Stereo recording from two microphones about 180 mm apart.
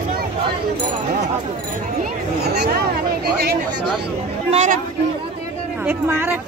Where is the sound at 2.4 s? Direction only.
65° right (ahead or behind).